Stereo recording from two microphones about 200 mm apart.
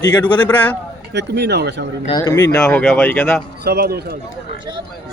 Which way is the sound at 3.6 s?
50° right (ahead or behind).